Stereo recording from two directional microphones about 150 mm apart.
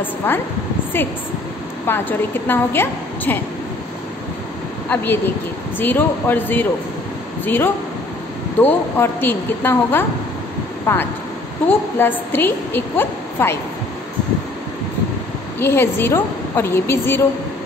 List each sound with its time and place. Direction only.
0.2 s a woman's voice: 15° left (ahead or behind)
4.8 s a woman's voice: 15° left (ahead or behind)
15.6 s a woman's voice: 15° left (ahead or behind)